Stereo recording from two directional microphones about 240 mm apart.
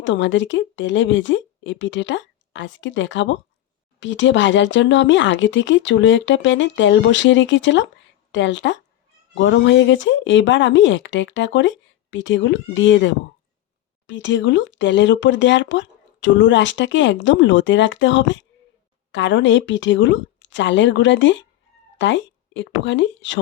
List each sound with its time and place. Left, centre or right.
0.0 s speech: left
14.1 s speech: left